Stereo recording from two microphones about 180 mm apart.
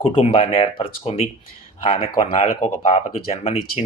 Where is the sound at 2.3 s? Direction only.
40° left (ahead or behind).